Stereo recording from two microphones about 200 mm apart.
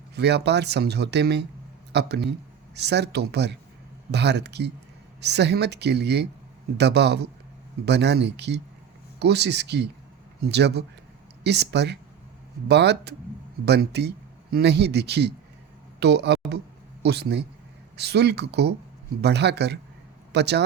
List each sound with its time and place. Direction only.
0.2 s a man's voice: 55° right (ahead or behind)